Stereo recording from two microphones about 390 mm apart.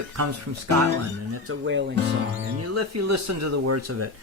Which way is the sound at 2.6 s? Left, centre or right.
Right.